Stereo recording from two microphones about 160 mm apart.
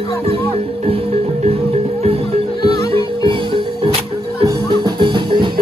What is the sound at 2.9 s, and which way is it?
Music, 35° right (ahead or behind).